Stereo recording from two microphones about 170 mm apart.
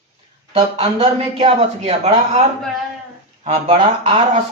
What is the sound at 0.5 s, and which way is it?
A man's voice, 35° right (ahead or behind).